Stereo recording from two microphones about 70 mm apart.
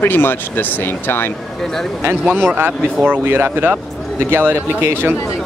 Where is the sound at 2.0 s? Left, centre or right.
Right.